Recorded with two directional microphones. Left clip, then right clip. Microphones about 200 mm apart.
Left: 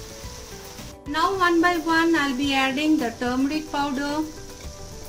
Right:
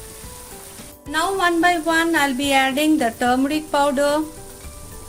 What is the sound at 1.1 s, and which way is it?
Speech, 40° right (ahead or behind).